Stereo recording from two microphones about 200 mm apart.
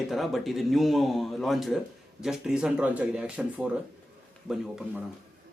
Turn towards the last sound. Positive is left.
turn(degrees=0)  # may be behind; listen again after turning